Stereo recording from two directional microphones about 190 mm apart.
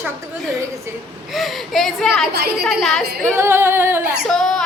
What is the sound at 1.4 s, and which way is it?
Speech, centre (ahead or behind).